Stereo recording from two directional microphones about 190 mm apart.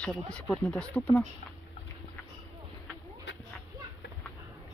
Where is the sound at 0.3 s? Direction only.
5° left (ahead or behind).